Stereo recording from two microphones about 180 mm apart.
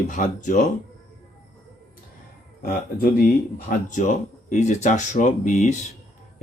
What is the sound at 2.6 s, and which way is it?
Speech, 55° left (ahead or behind).